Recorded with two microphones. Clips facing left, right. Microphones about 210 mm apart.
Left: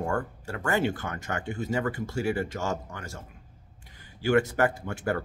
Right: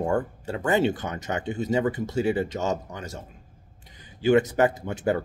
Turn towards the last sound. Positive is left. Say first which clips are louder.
# right 4 dB
turn(degrees=-20)  # may be behind; listen again after turning